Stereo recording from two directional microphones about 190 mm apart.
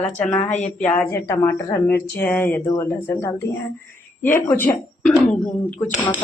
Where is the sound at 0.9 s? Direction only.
15° left (ahead or behind).